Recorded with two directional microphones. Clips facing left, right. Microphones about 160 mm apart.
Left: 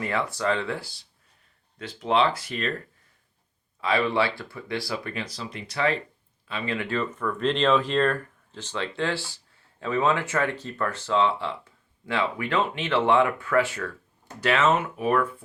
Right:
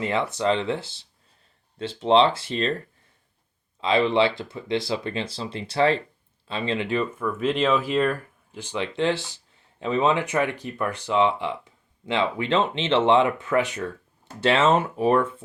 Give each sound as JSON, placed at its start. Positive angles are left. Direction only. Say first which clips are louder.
{"t": 0.0, "sound": "speech", "louder": "right 3 dB", "side_deg": -20}
{"t": 3.8, "sound": "speech", "louder": "right 4 dB", "side_deg": -20}